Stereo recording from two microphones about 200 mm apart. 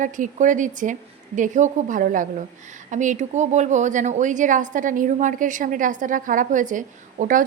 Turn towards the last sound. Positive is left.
turn(degrees=-40)  # may be behind; listen again after turning